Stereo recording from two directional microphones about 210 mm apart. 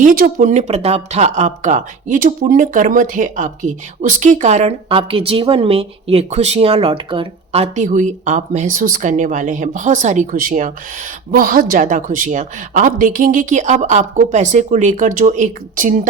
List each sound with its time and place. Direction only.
0.0 s a woman's voice: 40° right (ahead or behind)